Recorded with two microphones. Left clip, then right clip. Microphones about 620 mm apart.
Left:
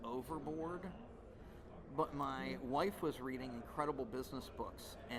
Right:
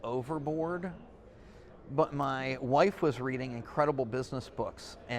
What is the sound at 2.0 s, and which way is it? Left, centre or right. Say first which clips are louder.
Speech: right 10 dB; right.